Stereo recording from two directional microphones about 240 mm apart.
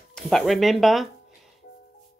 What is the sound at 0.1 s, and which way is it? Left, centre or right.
Speech, centre.